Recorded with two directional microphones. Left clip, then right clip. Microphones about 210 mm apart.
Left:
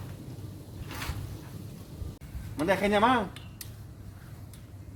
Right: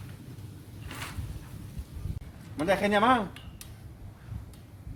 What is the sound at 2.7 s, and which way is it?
Speech, 35° right (ahead or behind).